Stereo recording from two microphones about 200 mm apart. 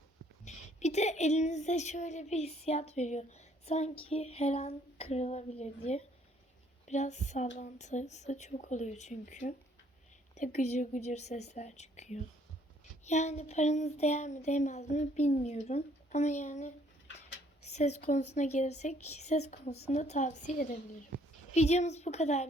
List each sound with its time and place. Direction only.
0.4 s speech: 35° left (ahead or behind)
17.7 s speech: 35° left (ahead or behind)